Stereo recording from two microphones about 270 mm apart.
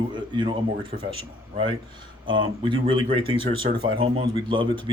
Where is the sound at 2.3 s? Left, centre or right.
Centre.